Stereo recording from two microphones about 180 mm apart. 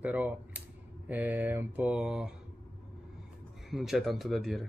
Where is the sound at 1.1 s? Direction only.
10° right (ahead or behind).